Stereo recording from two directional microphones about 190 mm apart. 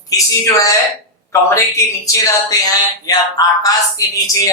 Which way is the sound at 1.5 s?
15° left (ahead or behind).